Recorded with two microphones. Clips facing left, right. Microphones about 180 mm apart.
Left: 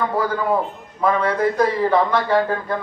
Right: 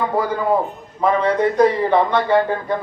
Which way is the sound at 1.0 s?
20° right (ahead or behind).